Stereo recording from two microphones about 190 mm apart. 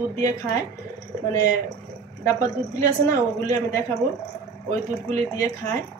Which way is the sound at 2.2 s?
20° left (ahead or behind).